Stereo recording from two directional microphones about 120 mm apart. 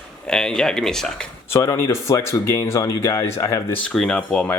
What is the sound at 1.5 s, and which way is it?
Speech, 25° left (ahead or behind).